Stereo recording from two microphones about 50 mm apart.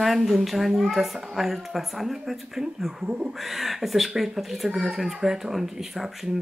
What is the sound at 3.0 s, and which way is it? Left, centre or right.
Speech, right.